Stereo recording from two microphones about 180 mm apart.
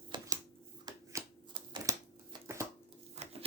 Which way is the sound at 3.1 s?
35° right (ahead or behind).